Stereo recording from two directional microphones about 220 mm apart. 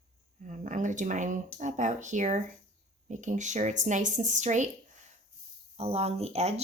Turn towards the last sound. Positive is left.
turn(degrees=-30)  # may be behind; listen again after turning